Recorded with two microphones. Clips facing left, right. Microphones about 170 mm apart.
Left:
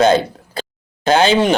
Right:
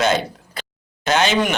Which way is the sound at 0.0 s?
30° left (ahead or behind).